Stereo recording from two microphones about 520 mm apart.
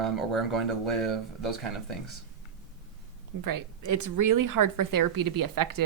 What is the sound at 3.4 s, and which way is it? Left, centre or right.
Speech, right.